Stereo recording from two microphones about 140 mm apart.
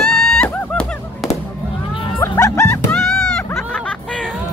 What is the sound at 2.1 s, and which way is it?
Music, 20° left (ahead or behind).